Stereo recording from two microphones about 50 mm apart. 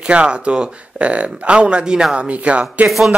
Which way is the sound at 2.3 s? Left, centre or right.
Right.